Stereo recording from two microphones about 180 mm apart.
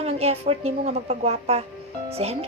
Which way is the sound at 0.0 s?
35° right (ahead or behind).